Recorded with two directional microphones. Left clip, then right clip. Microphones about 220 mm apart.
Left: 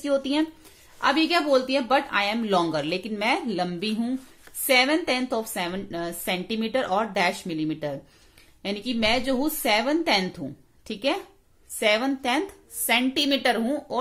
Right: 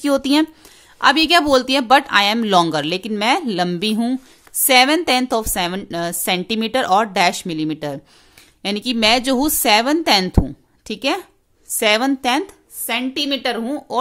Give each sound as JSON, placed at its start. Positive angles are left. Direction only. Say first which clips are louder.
{"t": 0.0, "sound": "a woman's voice", "louder": "right 7 dB", "side_deg": -40}
{"t": 12.8, "sound": "a woman's voice", "louder": "right 1 dB", "side_deg": -20}